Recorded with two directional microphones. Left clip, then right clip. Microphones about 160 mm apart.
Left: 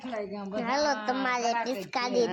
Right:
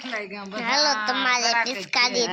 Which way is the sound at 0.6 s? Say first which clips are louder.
Right 6 dB; 40° left (ahead or behind).